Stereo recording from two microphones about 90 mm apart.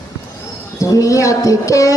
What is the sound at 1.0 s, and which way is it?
Music, 35° left (ahead or behind).